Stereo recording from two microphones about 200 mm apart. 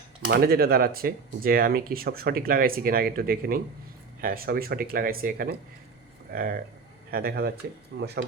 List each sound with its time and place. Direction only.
0.3 s speech: 50° right (ahead or behind)
7.9 s speech: 60° right (ahead or behind)